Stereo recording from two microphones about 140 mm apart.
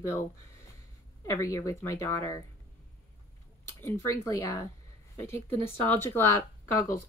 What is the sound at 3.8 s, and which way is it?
Speech, 20° left (ahead or behind).